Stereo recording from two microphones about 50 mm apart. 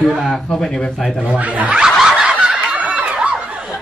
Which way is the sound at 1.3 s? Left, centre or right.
Right.